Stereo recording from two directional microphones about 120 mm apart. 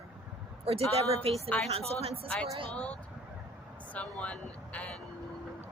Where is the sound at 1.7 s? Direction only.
55° right (ahead or behind).